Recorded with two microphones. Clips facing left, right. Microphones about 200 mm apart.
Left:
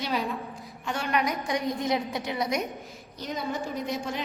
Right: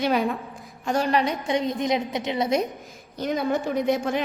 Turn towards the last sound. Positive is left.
turn(degrees=-60)  # may be behind; listen again after turning